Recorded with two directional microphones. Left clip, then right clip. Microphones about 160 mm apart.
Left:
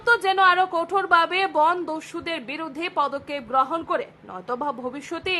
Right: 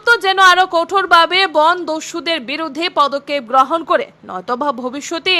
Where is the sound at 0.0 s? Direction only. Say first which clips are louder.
Right 8 dB; 20° right (ahead or behind).